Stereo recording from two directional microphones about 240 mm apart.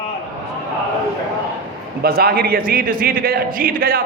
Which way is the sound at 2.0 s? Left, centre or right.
Right.